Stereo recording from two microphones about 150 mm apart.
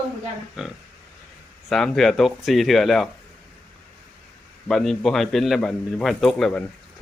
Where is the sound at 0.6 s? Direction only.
5° right (ahead or behind).